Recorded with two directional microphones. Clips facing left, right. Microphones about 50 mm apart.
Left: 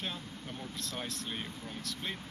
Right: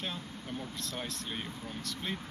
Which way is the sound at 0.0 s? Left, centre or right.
Centre.